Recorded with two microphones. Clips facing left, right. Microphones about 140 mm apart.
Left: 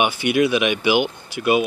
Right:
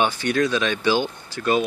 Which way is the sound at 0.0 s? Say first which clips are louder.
Left 3 dB; 10° left (ahead or behind).